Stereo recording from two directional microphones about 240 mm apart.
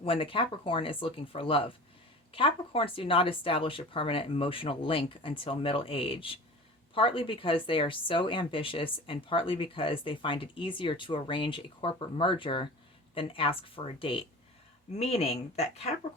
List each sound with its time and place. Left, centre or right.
0.0 s speech: left